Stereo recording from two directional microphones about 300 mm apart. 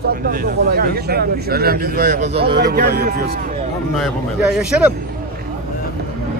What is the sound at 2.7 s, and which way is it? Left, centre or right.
Speech, right.